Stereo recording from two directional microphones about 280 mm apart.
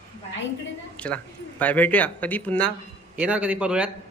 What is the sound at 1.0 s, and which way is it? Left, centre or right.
A man's voice, centre.